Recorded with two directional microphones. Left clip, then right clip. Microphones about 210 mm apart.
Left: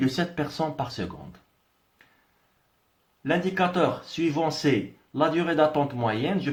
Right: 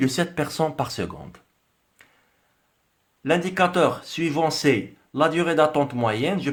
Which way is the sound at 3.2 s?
50° right (ahead or behind).